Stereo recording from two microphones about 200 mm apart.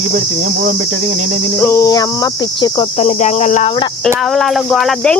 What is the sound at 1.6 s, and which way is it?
Cricket, 15° left (ahead or behind).